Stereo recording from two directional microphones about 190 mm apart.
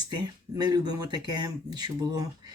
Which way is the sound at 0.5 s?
20° right (ahead or behind).